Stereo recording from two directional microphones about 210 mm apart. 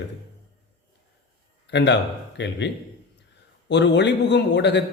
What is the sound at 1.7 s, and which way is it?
A man's voice, 55° left (ahead or behind).